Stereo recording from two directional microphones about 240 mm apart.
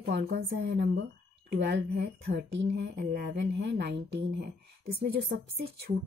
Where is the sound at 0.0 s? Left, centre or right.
Right.